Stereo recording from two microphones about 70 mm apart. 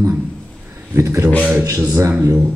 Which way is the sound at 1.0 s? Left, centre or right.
Right.